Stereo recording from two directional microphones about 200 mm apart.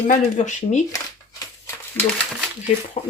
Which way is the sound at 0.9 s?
15° left (ahead or behind).